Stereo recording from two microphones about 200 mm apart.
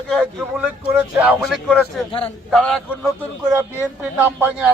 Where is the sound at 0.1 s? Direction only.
Centre (ahead or behind).